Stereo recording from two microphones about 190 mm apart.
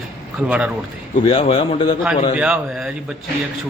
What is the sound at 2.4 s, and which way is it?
Speech, 5° right (ahead or behind).